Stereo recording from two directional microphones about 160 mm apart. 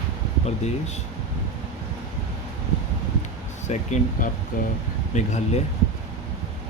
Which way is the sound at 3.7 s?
45° left (ahead or behind).